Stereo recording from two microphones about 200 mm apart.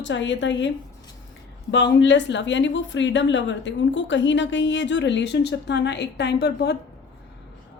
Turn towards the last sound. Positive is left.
turn(degrees=60)  # may be behind; listen again after turning